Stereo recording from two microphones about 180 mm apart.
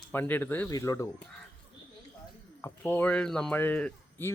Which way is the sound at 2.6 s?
10° left (ahead or behind).